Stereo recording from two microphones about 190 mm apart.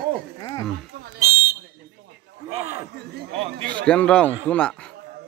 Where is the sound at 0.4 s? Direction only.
20° left (ahead or behind).